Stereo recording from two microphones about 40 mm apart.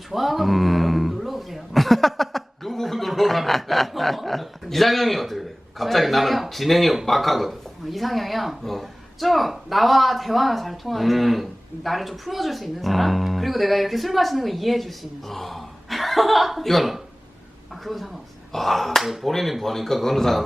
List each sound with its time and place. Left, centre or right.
0.1 s speech: centre